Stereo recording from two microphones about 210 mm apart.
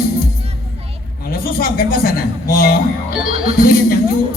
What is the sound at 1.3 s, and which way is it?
A man's voice, 45° left (ahead or behind).